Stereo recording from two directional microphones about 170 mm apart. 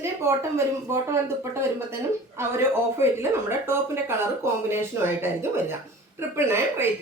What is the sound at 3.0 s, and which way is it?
Speech, 15° right (ahead or behind).